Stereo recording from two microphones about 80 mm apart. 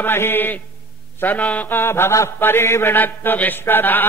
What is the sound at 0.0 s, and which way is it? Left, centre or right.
Mantra, left.